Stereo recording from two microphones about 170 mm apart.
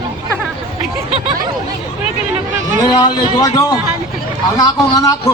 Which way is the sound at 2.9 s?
25° left (ahead or behind).